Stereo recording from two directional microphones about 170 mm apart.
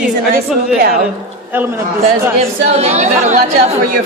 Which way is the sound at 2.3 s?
40° right (ahead or behind).